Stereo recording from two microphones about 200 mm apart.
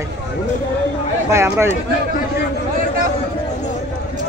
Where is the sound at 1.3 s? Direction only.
15° right (ahead or behind).